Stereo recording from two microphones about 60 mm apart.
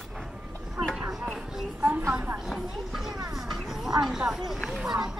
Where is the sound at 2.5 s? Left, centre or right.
Centre.